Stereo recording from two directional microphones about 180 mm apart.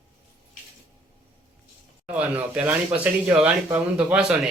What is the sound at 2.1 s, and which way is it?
Speech, 10° right (ahead or behind).